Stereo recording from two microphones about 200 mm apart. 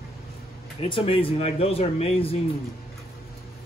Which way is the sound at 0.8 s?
25° left (ahead or behind).